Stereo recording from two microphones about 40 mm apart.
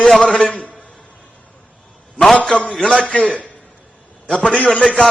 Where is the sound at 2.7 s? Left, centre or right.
Centre.